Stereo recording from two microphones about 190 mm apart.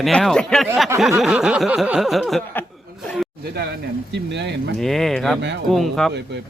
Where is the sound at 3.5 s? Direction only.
60° right (ahead or behind).